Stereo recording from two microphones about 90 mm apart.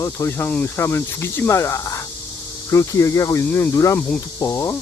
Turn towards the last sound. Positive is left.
turn(degrees=35)  # may be behind; listen again after turning